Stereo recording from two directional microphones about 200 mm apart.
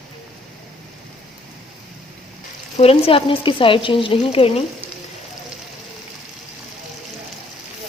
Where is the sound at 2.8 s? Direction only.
30° left (ahead or behind).